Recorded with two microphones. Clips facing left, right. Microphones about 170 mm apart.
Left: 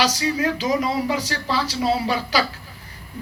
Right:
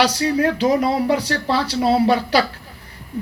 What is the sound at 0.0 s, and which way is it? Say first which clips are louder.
A woman's voice: right 4 dB; 60° right (ahead or behind).